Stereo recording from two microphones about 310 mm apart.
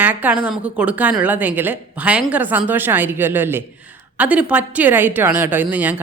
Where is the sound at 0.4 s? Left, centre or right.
Centre.